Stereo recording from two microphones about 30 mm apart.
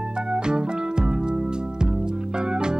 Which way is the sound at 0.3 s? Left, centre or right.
Right.